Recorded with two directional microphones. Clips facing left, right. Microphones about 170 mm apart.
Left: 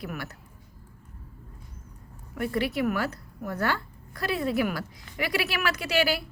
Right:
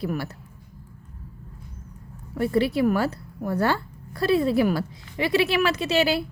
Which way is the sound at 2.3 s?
30° right (ahead or behind).